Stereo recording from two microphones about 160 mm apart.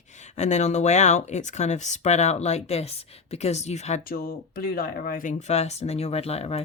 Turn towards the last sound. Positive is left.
turn(degrees=40)  # may be behind; listen again after turning